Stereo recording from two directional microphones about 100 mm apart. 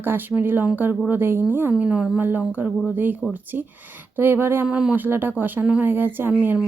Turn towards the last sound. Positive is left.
turn(degrees=-20)  # may be behind; listen again after turning